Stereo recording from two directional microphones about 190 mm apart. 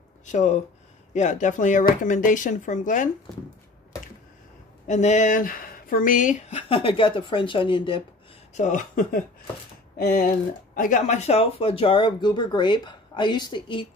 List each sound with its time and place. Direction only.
0.2 s speech: 40° left (ahead or behind)
4.8 s speech: 40° left (ahead or behind)
8.5 s speech: 40° left (ahead or behind); by 13.8 s 25° left (ahead or behind)